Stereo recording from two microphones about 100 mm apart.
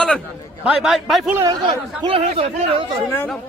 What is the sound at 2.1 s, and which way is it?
Speech, 65° right (ahead or behind).